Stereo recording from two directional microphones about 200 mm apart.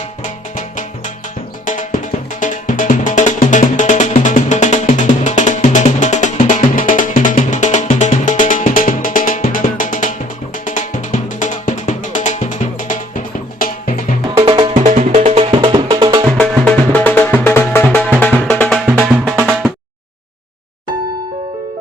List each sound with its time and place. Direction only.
0.2 s music: 40° left (ahead or behind)
14.3 s music: 20° right (ahead or behind)
16.4 s music: 5° left (ahead or behind)
18.9 s music: 10° right (ahead or behind)